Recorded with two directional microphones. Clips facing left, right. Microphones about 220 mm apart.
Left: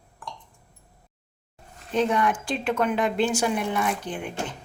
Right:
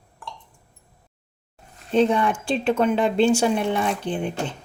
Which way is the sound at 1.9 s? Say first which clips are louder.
Right 4 dB; 30° right (ahead or behind).